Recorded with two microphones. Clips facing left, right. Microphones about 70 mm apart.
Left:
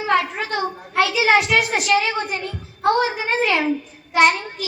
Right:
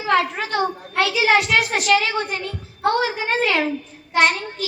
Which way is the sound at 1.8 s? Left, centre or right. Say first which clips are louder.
Right 1 dB; left.